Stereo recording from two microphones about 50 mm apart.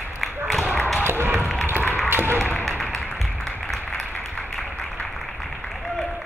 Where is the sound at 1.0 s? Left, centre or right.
Right.